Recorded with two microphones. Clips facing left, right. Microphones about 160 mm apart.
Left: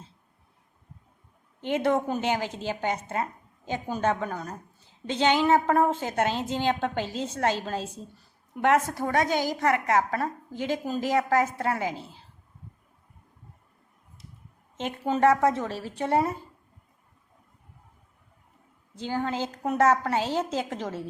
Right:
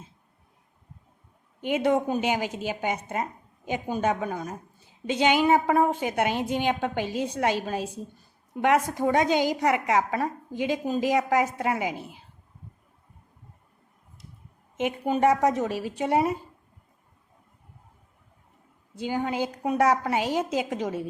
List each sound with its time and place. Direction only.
1.6 s a woman's voice: 15° right (ahead or behind)
14.8 s a woman's voice: 10° right (ahead or behind)
18.9 s a woman's voice: 15° right (ahead or behind)